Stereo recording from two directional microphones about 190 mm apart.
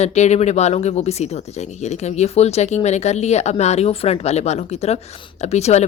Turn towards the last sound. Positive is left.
turn(degrees=35)  # may be behind; listen again after turning